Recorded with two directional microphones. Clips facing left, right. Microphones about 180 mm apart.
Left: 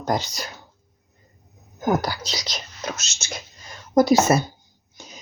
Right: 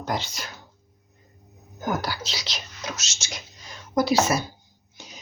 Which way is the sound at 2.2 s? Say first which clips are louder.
Left 3 dB; 40° left (ahead or behind).